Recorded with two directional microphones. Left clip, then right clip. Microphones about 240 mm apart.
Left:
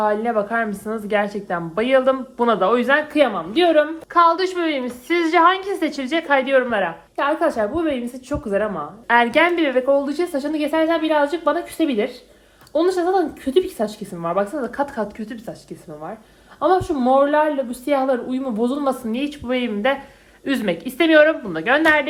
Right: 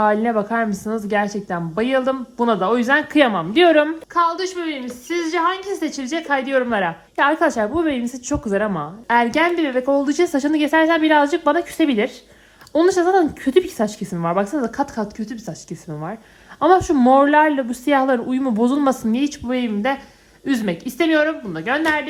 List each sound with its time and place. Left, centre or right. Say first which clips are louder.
0.0 s speech: right 2 dB; right
4.1 s a woman's voice: left 6 dB; centre
9.9 s speech: right 1 dB; right
16.6 s a woman's voice: right 3 dB; right; by 21.8 s centre